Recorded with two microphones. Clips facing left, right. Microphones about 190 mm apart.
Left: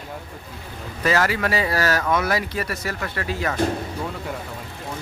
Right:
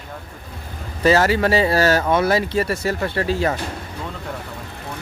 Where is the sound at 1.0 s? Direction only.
30° right (ahead or behind).